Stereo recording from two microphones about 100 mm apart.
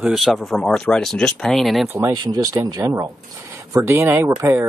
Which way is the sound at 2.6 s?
30° right (ahead or behind).